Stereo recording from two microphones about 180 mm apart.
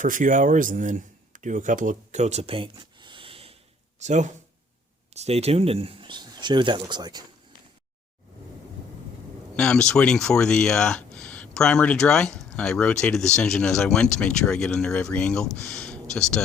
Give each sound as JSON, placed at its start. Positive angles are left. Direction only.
{"t": 0.0, "sound": "speech", "side_deg": -45}
{"t": 9.6, "sound": "speech", "side_deg": 5}